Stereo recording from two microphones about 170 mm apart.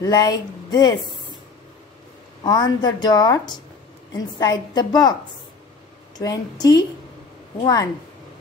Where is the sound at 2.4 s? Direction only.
25° left (ahead or behind).